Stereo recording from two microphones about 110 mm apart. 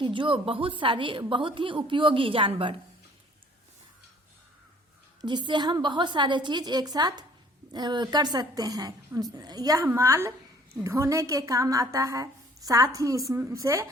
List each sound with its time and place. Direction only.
0.0 s a woman's voice: 50° right (ahead or behind)
5.2 s a woman's voice: 45° right (ahead or behind)